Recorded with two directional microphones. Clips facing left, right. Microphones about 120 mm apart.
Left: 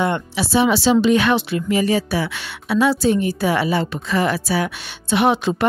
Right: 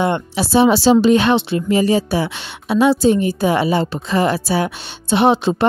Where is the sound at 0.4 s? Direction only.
35° right (ahead or behind).